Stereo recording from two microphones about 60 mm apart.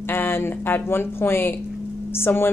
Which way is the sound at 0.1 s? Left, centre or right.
Left.